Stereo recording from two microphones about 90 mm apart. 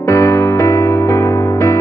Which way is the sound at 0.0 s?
30° left (ahead or behind).